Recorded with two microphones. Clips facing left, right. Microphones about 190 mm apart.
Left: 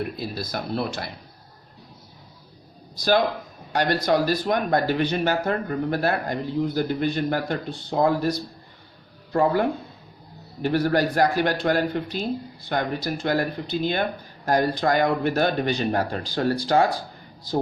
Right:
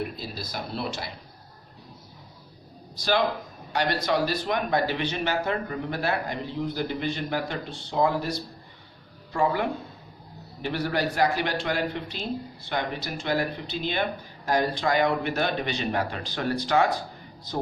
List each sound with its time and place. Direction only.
0.2 s speech: 55° left (ahead or behind)
3.7 s speech: 45° left (ahead or behind)
9.4 s speech: 45° left (ahead or behind)